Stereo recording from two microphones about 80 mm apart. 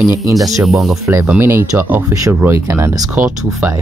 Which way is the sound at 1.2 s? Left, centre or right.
Right.